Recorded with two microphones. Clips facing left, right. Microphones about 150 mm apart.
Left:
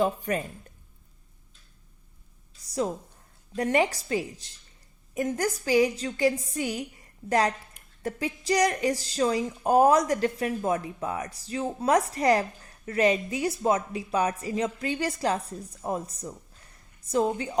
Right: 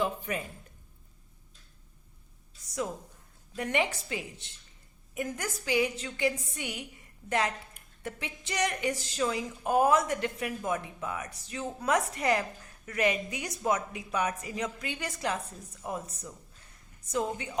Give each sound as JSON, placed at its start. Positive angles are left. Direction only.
{"t": 0.0, "sound": "speech", "side_deg": 45}
{"t": 2.6, "sound": "a sound", "side_deg": 35}
{"t": 3.5, "sound": "speech", "side_deg": 35}